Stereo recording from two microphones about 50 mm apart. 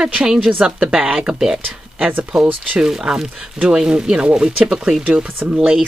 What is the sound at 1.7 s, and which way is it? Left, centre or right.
Speech, right.